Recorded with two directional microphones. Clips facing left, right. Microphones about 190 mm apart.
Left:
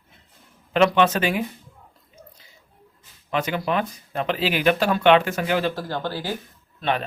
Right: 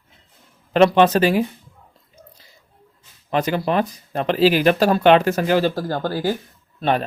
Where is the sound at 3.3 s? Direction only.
35° right (ahead or behind).